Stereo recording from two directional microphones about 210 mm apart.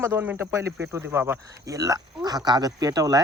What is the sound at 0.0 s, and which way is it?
Speech, 10° right (ahead or behind).